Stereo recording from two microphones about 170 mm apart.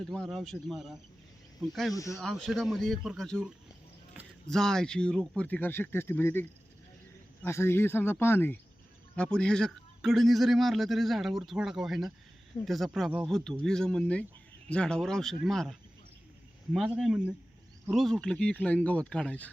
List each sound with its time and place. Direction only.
0.1 s speech: centre (ahead or behind)
1.9 s speech: 20° left (ahead or behind)
2.1 s speech: centre (ahead or behind)